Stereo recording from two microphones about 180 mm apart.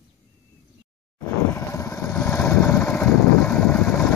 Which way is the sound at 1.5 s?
20° left (ahead or behind).